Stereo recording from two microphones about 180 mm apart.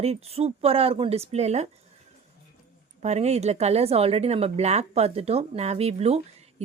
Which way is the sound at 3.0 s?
35° right (ahead or behind).